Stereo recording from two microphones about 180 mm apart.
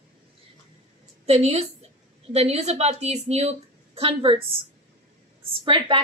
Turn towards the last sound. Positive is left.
turn(degrees=-25)  # may be behind; listen again after turning